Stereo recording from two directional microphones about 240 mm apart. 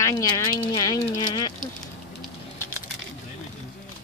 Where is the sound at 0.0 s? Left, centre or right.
Centre.